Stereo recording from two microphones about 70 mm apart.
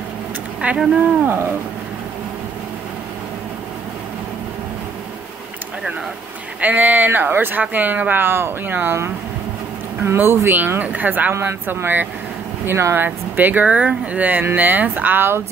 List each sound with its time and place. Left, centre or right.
0.6 s speech: centre
6.6 s speech: right
10.0 s speech: right